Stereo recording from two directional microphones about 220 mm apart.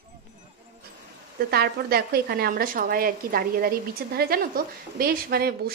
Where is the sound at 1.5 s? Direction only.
45° right (ahead or behind).